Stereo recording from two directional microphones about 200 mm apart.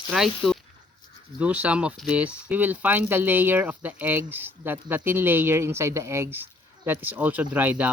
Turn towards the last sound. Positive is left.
turn(degrees=-10)  # may be behind; listen again after turning